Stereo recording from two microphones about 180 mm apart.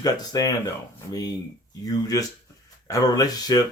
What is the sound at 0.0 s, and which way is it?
Speech, 20° left (ahead or behind).